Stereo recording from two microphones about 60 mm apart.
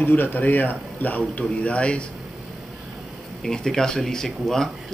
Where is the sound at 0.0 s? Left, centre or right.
Left; by 2.0 s centre.